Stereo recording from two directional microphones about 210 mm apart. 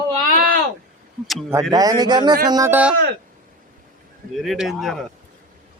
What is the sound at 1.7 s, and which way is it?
A man's voice, 15° right (ahead or behind).